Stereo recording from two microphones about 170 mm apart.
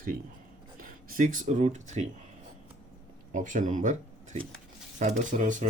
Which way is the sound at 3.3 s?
50° right (ahead or behind).